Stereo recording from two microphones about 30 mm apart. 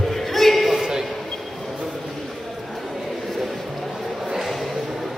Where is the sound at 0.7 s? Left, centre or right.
Centre.